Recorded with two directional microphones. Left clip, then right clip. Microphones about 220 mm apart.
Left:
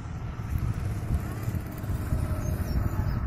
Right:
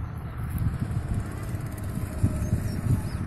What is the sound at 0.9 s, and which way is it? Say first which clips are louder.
Vehicle: even; 10° left (ahead or behind).